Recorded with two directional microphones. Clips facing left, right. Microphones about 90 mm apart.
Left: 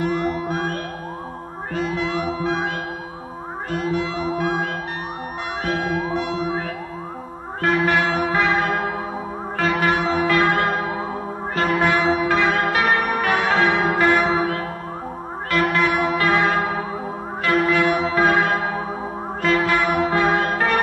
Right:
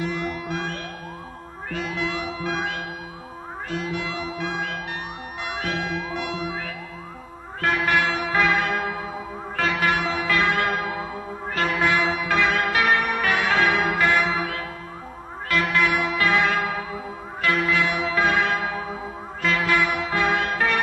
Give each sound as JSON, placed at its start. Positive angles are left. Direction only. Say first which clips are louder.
{"t": 0.0, "sound": "music", "louder": "left 6 dB", "side_deg": 40}
{"t": 3.7, "sound": "music", "louder": "left 5 dB", "side_deg": 40}
{"t": 7.6, "sound": "church bell", "louder": "left 3 dB", "side_deg": 30}
{"t": 19.4, "sound": "music", "louder": "left 3 dB", "side_deg": 35}